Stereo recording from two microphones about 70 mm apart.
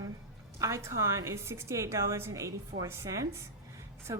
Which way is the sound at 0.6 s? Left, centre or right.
Right.